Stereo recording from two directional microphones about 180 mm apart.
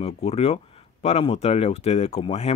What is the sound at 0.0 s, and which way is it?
Speech, 35° left (ahead or behind).